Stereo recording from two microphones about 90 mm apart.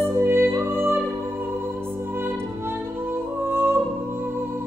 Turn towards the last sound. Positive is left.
turn(degrees=-25)  # may be behind; listen again after turning